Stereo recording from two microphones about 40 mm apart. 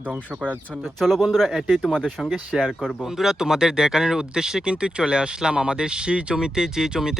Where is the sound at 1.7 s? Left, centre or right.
Centre.